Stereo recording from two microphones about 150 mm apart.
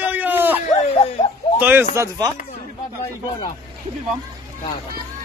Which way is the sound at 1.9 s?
20° right (ahead or behind).